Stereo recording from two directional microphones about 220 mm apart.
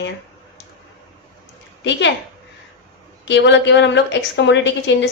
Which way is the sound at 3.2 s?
55° left (ahead or behind).